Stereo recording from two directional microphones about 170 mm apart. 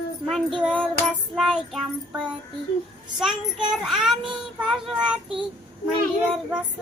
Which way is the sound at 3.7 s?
Centre (ahead or behind).